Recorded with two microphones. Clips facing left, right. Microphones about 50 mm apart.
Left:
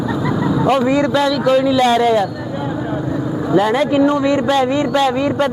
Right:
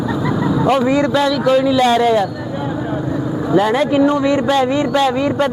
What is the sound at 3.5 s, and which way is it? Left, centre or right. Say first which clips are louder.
Speech: even; centre.